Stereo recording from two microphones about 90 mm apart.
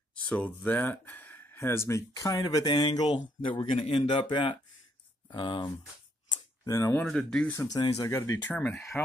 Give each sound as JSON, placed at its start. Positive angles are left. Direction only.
{"t": 0.1, "sound": "speech", "side_deg": 15}
{"t": 6.2, "sound": "a sound", "side_deg": 60}
{"t": 6.7, "sound": "speech", "side_deg": 30}
{"t": 7.1, "sound": "speech", "side_deg": 5}
{"t": 7.5, "sound": "speech", "side_deg": 40}
{"t": 8.5, "sound": "speech", "side_deg": 25}